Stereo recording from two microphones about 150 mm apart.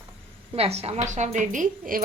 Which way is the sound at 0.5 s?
40° right (ahead or behind).